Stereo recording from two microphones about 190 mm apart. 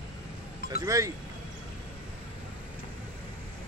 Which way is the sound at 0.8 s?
15° right (ahead or behind).